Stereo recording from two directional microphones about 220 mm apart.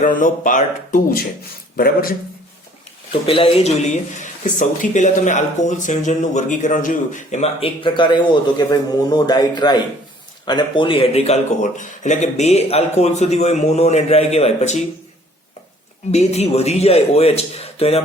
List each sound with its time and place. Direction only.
0.0 s speech: 35° left (ahead or behind)
3.1 s speech: 25° left (ahead or behind)
16.1 s speech: 30° left (ahead or behind)